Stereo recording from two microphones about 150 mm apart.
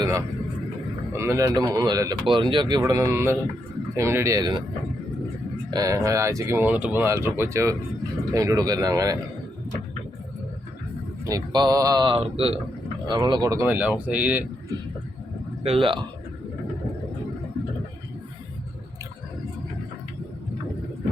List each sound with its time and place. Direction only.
0.0 s a sound: 25° right (ahead or behind)
1.1 s speech: 20° right (ahead or behind)
5.7 s speech: 20° right (ahead or behind)
11.3 s speech: 25° right (ahead or behind)
13.1 s speech: 30° right (ahead or behind); by 14.4 s 10° right (ahead or behind)
15.6 s speech: 40° right (ahead or behind)